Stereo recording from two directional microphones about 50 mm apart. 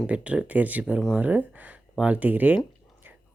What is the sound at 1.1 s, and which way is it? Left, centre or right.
Speech, right.